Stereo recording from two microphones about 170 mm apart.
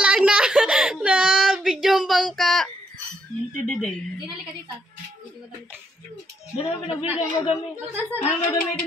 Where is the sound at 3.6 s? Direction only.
5° left (ahead or behind).